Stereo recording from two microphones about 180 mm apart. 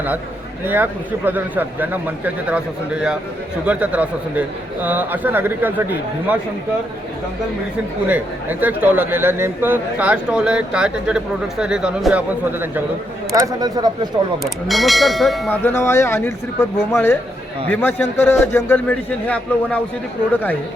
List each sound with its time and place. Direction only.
0.6 s speech: 10° right (ahead or behind)
8.0 s speech: 10° right (ahead or behind)
14.7 s speech: centre (ahead or behind)
15.6 s speech: 15° left (ahead or behind)